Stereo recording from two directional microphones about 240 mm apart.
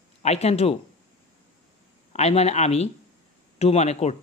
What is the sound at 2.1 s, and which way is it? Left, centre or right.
Speech, left.